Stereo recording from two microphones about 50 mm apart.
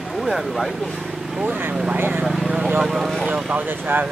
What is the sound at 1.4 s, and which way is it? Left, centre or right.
Speech, right.